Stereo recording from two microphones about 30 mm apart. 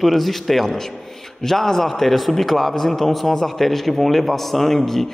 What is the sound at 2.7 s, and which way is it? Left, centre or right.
A man's voice, centre.